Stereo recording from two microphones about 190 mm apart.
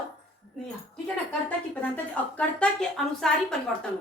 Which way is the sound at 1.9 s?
5° left (ahead or behind).